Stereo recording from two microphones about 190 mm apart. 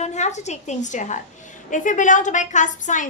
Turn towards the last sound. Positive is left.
turn(degrees=40)  # may be behind; listen again after turning